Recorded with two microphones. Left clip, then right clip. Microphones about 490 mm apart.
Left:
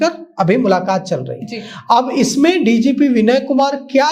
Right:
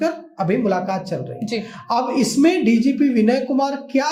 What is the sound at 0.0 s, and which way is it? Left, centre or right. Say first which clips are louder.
Speech: left 6 dB; left.